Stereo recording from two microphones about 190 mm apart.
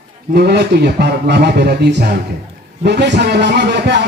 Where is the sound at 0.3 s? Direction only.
60° right (ahead or behind).